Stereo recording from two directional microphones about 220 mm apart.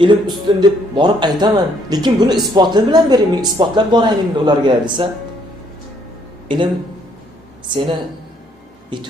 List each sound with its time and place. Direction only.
0.0 s speech: 20° right (ahead or behind)
6.5 s speech: 20° right (ahead or behind)
8.9 s speech: 20° right (ahead or behind)